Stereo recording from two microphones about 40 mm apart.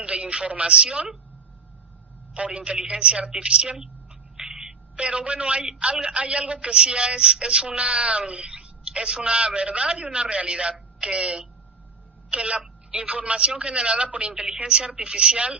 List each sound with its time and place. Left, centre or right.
0.0 s speech: right
2.3 s a man's voice: right
4.4 s a sound: centre
4.9 s a man's voice: right